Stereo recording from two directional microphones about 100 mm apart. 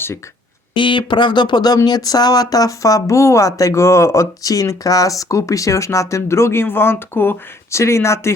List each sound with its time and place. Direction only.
0.7 s speech: 55° left (ahead or behind); by 8.3 s 25° left (ahead or behind)